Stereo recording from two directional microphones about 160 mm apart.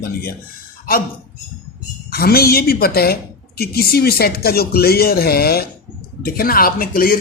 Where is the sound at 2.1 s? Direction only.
75° left (ahead or behind).